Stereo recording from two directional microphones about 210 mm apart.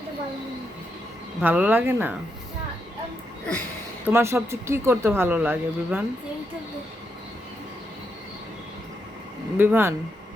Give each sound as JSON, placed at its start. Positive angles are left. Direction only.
{"t": 1.4, "sound": "speech", "side_deg": -5}
{"t": 4.0, "sound": "speech", "side_deg": -10}
{"t": 9.6, "sound": "speech", "side_deg": -10}